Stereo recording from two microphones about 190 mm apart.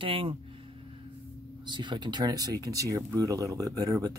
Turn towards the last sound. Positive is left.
turn(degrees=-15)  # may be behind; listen again after turning